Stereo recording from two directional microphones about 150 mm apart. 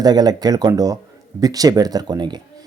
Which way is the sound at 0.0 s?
25° right (ahead or behind).